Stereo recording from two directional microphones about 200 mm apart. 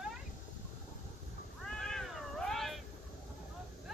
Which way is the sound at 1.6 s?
5° left (ahead or behind).